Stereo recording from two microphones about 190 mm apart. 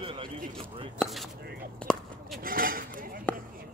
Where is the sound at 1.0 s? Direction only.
Centre (ahead or behind).